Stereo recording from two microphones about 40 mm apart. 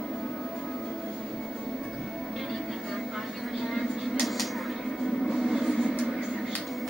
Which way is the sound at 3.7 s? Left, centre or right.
Centre.